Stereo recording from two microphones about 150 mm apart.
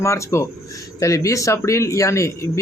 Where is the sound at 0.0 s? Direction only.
20° left (ahead or behind).